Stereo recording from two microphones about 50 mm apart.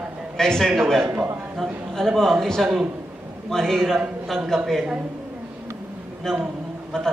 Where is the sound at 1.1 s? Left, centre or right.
Right.